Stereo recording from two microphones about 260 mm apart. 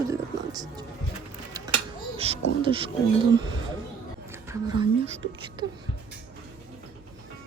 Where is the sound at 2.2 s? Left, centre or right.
Right.